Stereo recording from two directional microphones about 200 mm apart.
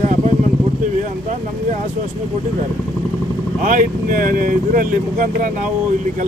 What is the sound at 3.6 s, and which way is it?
Speech, 40° right (ahead or behind).